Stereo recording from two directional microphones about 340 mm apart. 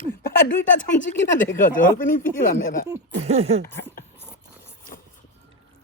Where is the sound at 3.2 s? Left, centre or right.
Centre.